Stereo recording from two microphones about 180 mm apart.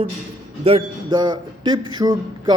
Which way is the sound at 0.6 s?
30° right (ahead or behind).